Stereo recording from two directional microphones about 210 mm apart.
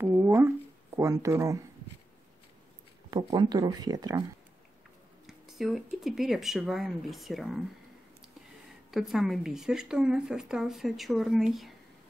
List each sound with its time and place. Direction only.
0.0 s a sound: 10° right (ahead or behind)
0.9 s speech: 15° right (ahead or behind)
3.1 s speech: 20° right (ahead or behind)
5.2 s speech: centre (ahead or behind)
8.9 s speech: centre (ahead or behind)